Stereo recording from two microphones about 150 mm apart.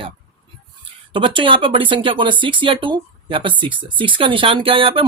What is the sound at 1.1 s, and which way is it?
Speech, 35° right (ahead or behind).